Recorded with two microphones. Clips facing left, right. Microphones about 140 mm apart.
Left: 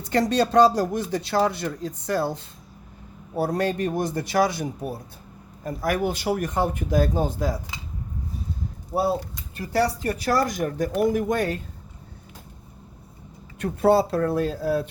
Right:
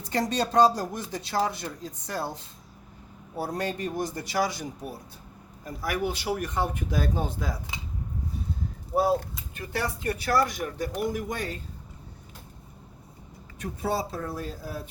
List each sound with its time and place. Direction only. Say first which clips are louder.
0.1 s a man's voice: left 6 dB; 70° left (ahead or behind); by 7.5 s 40° left (ahead or behind)
9.6 s speech: left 8 dB; 35° left (ahead or behind); by 11.6 s 55° left (ahead or behind)
13.6 s speech: left 10 dB; 65° left (ahead or behind)